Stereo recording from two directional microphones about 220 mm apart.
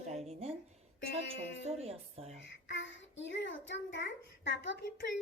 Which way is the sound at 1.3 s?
25° right (ahead or behind).